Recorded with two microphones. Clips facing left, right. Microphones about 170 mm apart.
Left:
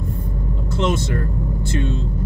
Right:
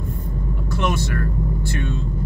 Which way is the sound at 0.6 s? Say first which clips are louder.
Left 3 dB; 25° left (ahead or behind).